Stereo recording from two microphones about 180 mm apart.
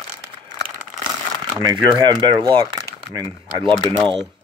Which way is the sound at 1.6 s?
20° right (ahead or behind).